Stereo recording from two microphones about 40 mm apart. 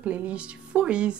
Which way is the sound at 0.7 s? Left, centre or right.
Right.